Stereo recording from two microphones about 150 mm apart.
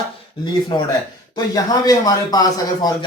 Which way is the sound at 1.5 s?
25° left (ahead or behind).